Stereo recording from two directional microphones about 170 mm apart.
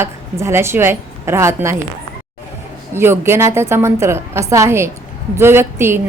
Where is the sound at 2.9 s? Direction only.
15° right (ahead or behind).